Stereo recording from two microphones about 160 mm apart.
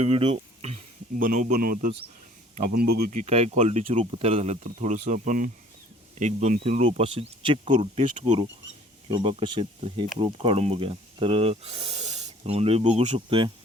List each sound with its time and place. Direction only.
0.0 s speech: 40° right (ahead or behind)
1.2 s speech: 50° right (ahead or behind); by 13.5 s 35° right (ahead or behind)